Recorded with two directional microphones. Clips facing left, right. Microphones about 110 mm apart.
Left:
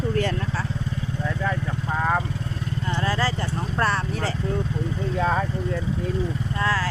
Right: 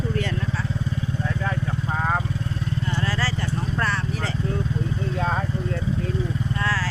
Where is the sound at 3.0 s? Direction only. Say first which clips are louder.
Left 5 dB; 20° left (ahead or behind).